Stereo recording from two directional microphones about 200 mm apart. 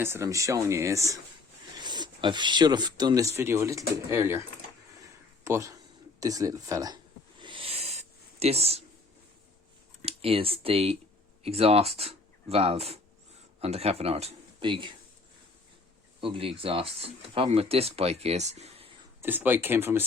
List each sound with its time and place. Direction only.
0.0 s speech: 15° right (ahead or behind)
5.5 s speech: 15° right (ahead or behind)
6.1 s a sound: 15° right (ahead or behind)
10.0 s speech: 30° right (ahead or behind)
16.2 s speech: 25° right (ahead or behind)
19.2 s speech: 10° right (ahead or behind)